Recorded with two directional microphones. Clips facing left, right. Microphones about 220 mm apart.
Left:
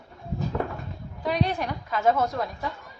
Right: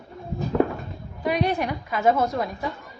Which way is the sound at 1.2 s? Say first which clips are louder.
Right 3 dB; 10° right (ahead or behind).